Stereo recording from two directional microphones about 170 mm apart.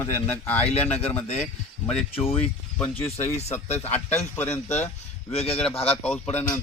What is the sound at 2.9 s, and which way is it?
Speech, 35° left (ahead or behind).